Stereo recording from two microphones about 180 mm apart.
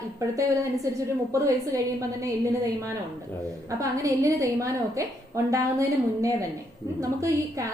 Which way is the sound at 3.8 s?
20° right (ahead or behind).